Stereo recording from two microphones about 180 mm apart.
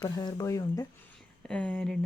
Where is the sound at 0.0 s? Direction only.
25° left (ahead or behind).